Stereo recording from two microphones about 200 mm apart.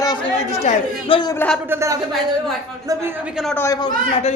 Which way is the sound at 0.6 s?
30° left (ahead or behind).